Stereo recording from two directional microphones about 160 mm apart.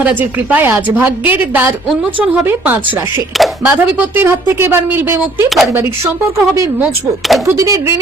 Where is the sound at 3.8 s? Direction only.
10° right (ahead or behind).